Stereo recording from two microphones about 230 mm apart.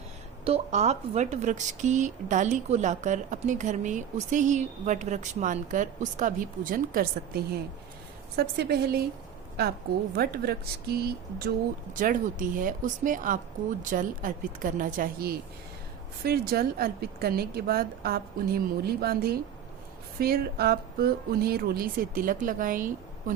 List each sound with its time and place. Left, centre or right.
0.4 s speech: right
10.2 s speech: right